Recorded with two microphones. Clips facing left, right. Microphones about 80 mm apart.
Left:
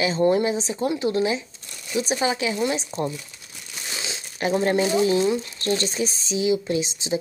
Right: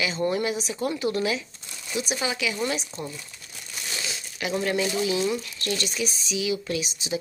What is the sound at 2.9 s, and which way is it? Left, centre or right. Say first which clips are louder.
Speech: left 8 dB; centre.